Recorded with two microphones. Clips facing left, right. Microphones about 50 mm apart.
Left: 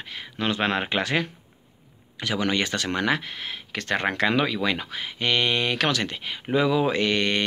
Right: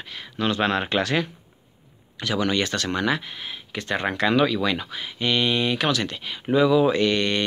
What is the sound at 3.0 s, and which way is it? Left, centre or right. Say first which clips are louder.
Speech: even; left.